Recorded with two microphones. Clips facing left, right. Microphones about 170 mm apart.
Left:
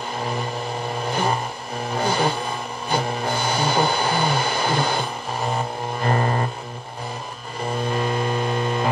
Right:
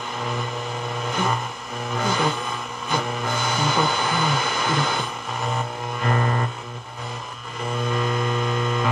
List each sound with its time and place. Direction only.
1.0 s vehicle: 35° left (ahead or behind)
1.9 s music: 35° left (ahead or behind)
7.8 s a sound: 35° left (ahead or behind)